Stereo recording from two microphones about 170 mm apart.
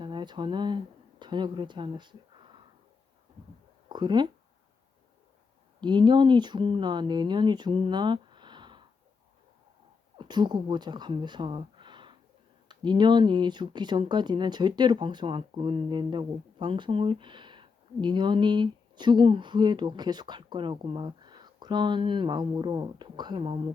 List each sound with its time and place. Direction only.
0.0 s speech: 25° right (ahead or behind)
3.8 s speech: 25° right (ahead or behind)
5.8 s speech: 25° right (ahead or behind)
10.2 s speech: 25° right (ahead or behind)